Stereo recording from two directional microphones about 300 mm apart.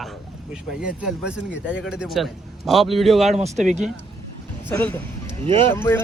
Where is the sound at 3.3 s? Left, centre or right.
Right.